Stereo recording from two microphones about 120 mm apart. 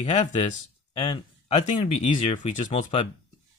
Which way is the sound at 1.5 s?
90° left.